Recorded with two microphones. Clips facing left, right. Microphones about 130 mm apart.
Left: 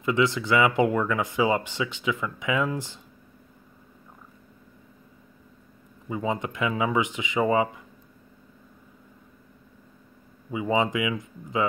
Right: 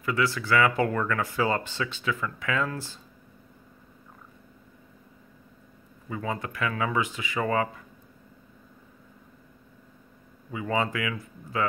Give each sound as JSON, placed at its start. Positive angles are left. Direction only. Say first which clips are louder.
{"t": 0.0, "sound": "speech", "louder": "left 4 dB", "side_deg": 20}
{"t": 6.0, "sound": "speech", "louder": "left 4 dB", "side_deg": 20}
{"t": 10.5, "sound": "speech", "louder": "left 4 dB", "side_deg": 15}